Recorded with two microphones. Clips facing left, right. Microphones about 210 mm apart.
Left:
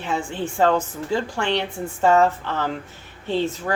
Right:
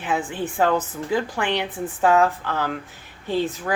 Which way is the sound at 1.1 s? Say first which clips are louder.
Even; 15° right (ahead or behind).